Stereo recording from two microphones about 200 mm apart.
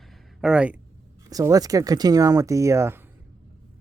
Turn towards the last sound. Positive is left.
turn(degrees=-15)  # may be behind; listen again after turning